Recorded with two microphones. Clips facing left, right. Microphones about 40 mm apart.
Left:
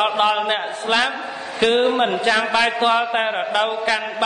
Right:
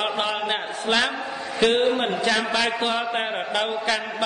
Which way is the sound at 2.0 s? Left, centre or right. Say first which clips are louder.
Left 4 dB; left.